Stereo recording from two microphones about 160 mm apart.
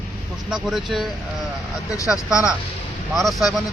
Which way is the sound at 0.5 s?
Centre (ahead or behind).